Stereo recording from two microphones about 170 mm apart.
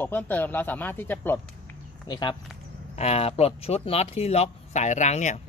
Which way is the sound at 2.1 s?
25° left (ahead or behind).